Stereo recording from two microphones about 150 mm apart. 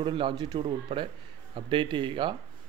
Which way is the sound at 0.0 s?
35° right (ahead or behind).